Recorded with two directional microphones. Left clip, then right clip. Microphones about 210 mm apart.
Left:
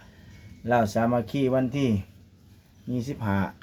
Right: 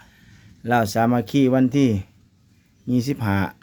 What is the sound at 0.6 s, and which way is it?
Speech, 45° right (ahead or behind).